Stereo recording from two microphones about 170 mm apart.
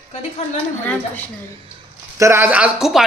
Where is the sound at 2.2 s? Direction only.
15° right (ahead or behind).